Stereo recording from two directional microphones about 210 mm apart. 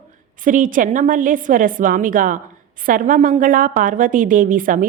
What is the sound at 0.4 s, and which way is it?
A woman's voice, 40° right (ahead or behind).